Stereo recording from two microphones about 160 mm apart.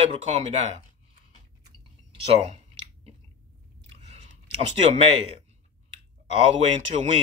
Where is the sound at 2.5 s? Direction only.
40° right (ahead or behind).